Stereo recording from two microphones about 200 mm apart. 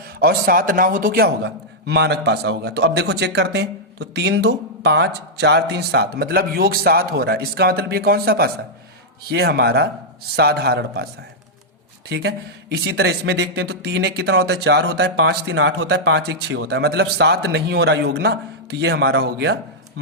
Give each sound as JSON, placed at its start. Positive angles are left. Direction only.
{"t": 0.2, "sound": "speech", "side_deg": -45}